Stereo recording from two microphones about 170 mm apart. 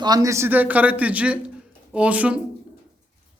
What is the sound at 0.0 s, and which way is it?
Speech, 20° right (ahead or behind).